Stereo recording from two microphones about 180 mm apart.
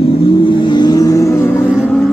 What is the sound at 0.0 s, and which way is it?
Vehicle, 30° left (ahead or behind).